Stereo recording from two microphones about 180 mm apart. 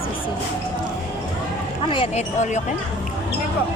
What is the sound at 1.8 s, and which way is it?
Speech, 30° left (ahead or behind).